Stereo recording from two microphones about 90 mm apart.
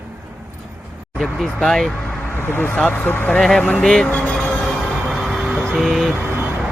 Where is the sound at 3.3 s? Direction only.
5° left (ahead or behind).